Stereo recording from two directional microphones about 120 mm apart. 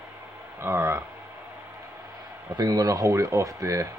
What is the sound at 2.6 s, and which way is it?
Speech, 30° right (ahead or behind).